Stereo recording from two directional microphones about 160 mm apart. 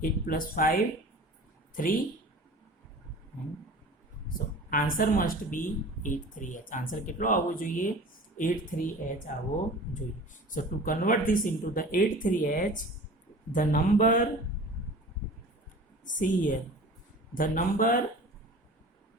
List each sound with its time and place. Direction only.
0.0 s speech: 60° left (ahead or behind)
4.7 s speech: 60° left (ahead or behind)
10.5 s speech: 60° left (ahead or behind)
16.0 s speech: 55° left (ahead or behind)